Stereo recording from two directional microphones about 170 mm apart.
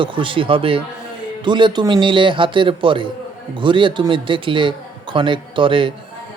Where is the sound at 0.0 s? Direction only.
30° right (ahead or behind).